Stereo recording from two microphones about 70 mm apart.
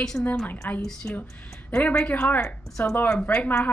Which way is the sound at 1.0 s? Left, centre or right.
Centre.